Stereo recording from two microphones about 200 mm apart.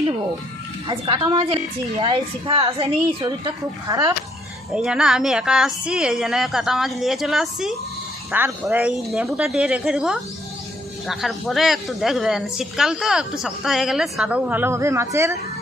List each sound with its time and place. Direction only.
0.8 s a woman's voice: 25° right (ahead or behind)
4.7 s a woman's voice: 5° right (ahead or behind)